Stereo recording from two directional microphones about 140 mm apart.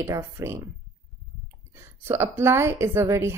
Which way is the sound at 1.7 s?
20° right (ahead or behind).